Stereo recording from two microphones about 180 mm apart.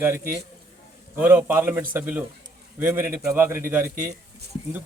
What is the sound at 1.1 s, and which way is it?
A man's voice, 10° right (ahead or behind).